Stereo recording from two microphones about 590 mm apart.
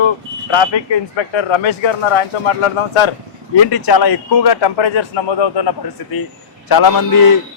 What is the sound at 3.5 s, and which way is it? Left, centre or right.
A man's voice, left.